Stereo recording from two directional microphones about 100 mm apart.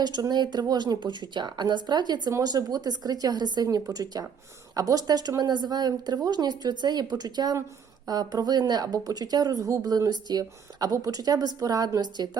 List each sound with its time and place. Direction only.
0.0 s a woman's voice: 45° right (ahead or behind)